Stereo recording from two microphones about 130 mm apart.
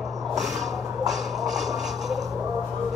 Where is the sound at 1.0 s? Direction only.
Centre (ahead or behind).